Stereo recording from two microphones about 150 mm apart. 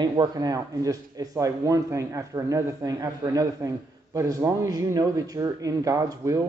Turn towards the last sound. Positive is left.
turn(degrees=-20)  # may be behind; listen again after turning